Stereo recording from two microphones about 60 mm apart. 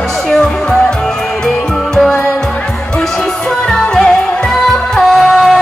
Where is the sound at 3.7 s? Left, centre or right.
Centre.